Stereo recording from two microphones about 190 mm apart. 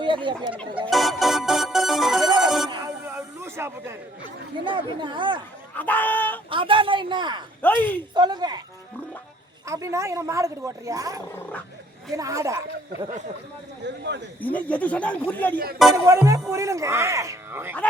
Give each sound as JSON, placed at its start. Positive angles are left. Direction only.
{"t": 0.0, "sound": "speech", "side_deg": -25}
{"t": 0.9, "sound": "music", "side_deg": 0}
{"t": 2.4, "sound": "bell", "side_deg": 0}
{"t": 3.4, "sound": "a sound", "side_deg": -15}
{"t": 4.6, "sound": "speech", "side_deg": -25}
{"t": 5.7, "sound": "speech", "side_deg": 10}
{"t": 6.5, "sound": "speech", "side_deg": -25}
{"t": 7.6, "sound": "speech", "side_deg": 10}
{"t": 8.1, "sound": "speech", "side_deg": -20}
{"t": 9.6, "sound": "a woman's voice", "side_deg": -15}
{"t": 13.8, "sound": "speech", "side_deg": -65}
{"t": 14.4, "sound": "speech", "side_deg": 10}
{"t": 16.0, "sound": "a woman's voice", "side_deg": -15}